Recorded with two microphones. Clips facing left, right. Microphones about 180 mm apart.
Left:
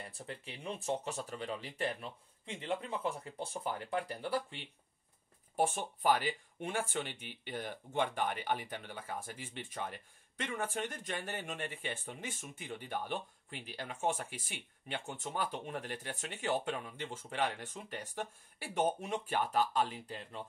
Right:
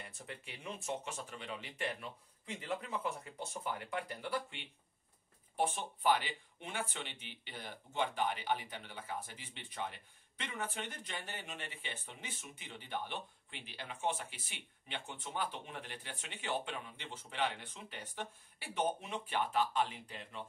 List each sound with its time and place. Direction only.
0.0 s speech: 30° left (ahead or behind)
5.6 s speech: 45° left (ahead or behind)